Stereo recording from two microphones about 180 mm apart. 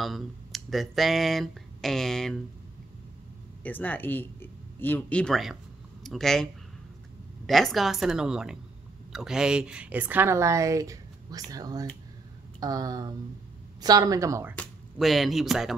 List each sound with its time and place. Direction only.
0.0 s speech: centre (ahead or behind)
3.6 s a woman's voice: 10° left (ahead or behind); by 14.5 s 15° right (ahead or behind)
14.6 s speech: centre (ahead or behind)